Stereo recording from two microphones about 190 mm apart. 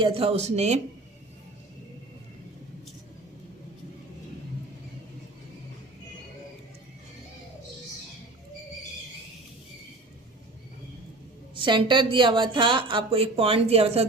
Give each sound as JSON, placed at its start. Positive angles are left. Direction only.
{"t": 0.0, "sound": "speech", "side_deg": -30}
{"t": 11.5, "sound": "speech", "side_deg": -25}